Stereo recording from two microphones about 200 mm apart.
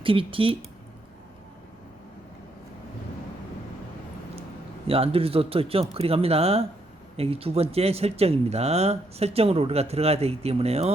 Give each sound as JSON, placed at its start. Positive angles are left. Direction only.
{"t": 0.0, "sound": "a man's voice", "side_deg": -25}
{"t": 4.9, "sound": "a man's voice", "side_deg": -30}